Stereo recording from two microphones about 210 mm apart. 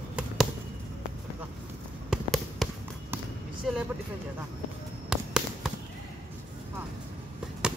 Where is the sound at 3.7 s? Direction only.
Centre (ahead or behind).